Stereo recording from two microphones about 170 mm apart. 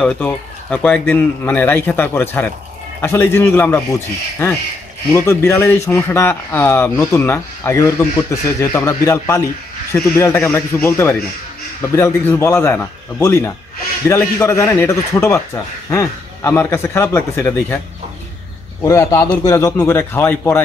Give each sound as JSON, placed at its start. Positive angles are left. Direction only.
{"t": 0.0, "sound": "speech", "side_deg": 5}
{"t": 18.8, "sound": "a man's voice", "side_deg": 20}